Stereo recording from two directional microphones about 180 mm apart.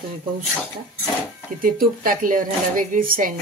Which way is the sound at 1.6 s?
50° right (ahead or behind).